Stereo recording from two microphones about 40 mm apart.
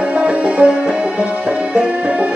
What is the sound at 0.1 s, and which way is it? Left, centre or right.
Music, right.